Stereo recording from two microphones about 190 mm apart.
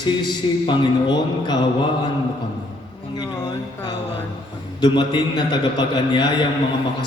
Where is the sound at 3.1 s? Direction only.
20° left (ahead or behind).